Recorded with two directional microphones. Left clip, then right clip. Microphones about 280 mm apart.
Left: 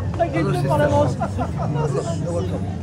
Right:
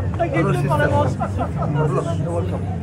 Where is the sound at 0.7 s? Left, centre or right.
Left.